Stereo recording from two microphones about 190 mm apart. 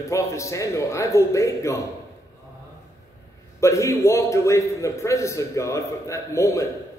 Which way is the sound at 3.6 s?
15° left (ahead or behind).